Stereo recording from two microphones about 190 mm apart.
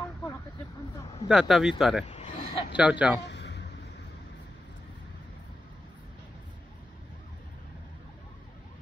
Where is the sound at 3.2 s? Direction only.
65° left (ahead or behind).